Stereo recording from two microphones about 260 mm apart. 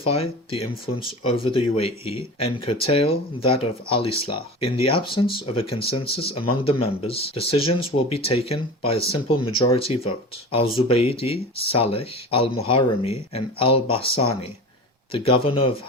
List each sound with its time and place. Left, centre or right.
0.0 s speech: left